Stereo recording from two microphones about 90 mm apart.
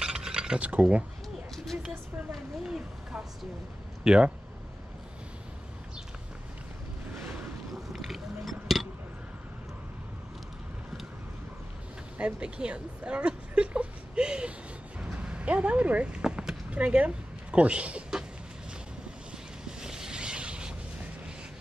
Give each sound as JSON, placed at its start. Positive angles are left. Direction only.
{"t": 0.0, "sound": "a sound", "side_deg": -10}
{"t": 2.6, "sound": "speech", "side_deg": -10}
{"t": 7.9, "sound": "chink", "side_deg": 0}
{"t": 12.2, "sound": "speech", "side_deg": -10}
{"t": 15.0, "sound": "a sound", "side_deg": -10}
{"t": 19.6, "sound": "boat", "side_deg": -5}